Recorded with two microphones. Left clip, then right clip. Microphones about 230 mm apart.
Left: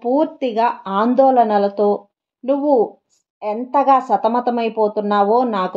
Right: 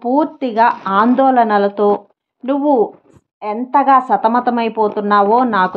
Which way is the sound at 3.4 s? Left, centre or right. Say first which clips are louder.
Right 3 dB; centre.